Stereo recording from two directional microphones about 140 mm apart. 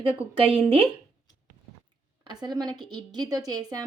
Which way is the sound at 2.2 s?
30° right (ahead or behind).